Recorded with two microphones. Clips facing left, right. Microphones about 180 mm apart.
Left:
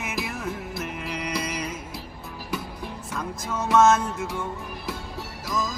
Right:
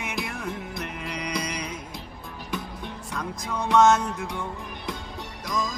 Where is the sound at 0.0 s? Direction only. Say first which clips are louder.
Left 1 dB; 5° left (ahead or behind).